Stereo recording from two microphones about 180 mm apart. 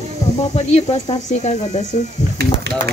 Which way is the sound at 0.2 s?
40° left (ahead or behind).